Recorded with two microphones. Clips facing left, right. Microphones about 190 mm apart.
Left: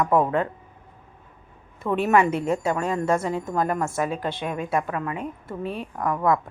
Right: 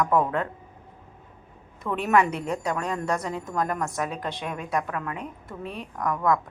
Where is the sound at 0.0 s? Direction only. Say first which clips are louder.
Left 2 dB; 25° left (ahead or behind).